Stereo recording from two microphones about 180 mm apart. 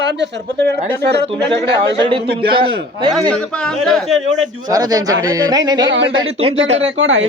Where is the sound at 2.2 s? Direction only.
60° right (ahead or behind).